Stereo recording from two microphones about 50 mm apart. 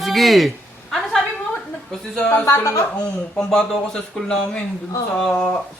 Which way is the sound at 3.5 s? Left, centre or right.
Centre.